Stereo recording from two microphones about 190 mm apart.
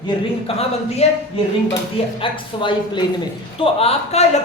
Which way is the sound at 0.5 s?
30° left (ahead or behind).